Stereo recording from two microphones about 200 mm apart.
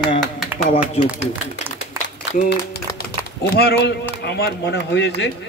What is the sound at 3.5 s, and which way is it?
A man's voice, 50° left (ahead or behind).